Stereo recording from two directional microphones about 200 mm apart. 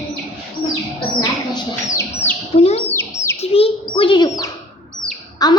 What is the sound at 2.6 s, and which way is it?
Speech, 30° left (ahead or behind).